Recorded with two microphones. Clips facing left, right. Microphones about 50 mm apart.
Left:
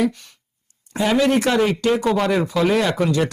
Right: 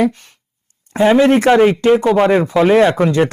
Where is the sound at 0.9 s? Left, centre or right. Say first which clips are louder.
Right 7 dB; right.